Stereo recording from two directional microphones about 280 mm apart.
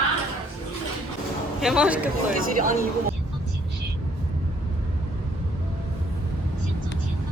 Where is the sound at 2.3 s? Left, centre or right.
Right.